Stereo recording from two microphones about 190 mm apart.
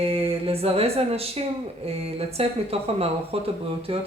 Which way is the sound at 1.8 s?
30° right (ahead or behind).